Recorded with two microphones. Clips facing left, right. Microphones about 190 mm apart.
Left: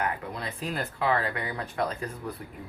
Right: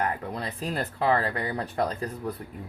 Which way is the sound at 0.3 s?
35° right (ahead or behind).